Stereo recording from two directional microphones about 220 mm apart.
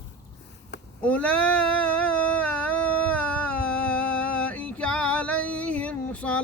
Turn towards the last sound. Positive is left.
turn(degrees=5)  # may be behind; listen again after turning